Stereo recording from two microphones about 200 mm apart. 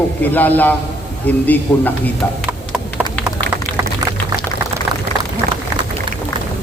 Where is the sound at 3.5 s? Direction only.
55° right (ahead or behind).